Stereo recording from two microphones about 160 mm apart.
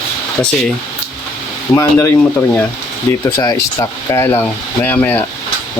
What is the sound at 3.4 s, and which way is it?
Speech, 20° left (ahead or behind).